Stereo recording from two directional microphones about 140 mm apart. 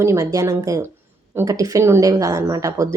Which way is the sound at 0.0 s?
20° right (ahead or behind).